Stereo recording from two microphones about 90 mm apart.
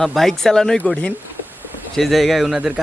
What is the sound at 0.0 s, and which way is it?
Speech, 5° left (ahead or behind).